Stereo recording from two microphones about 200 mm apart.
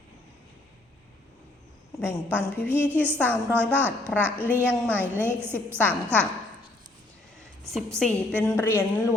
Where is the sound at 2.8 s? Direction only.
10° right (ahead or behind).